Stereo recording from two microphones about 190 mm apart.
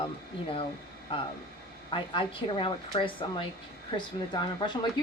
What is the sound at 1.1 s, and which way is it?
Speech, 25° left (ahead or behind).